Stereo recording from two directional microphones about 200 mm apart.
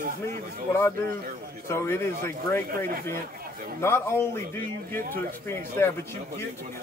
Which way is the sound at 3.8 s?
10° left (ahead or behind).